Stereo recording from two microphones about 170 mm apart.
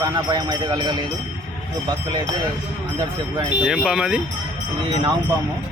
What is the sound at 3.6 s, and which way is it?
Speech, 5° right (ahead or behind).